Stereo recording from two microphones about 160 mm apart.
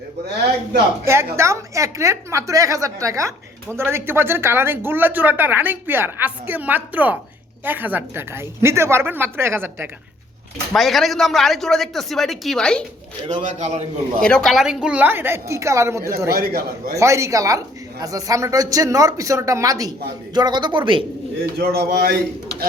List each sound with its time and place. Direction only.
1.0 s a woman's voice: 15° right (ahead or behind)
10.8 s a man's voice: centre (ahead or behind)
13.2 s a man's voice: 45° right (ahead or behind)
14.2 s a woman's voice: 5° left (ahead or behind); by 16.0 s 20° right (ahead or behind)
16.3 s a man's voice: 75° right (ahead or behind)
17.0 s speech: 20° right (ahead or behind)
21.6 s speech: 75° right (ahead or behind)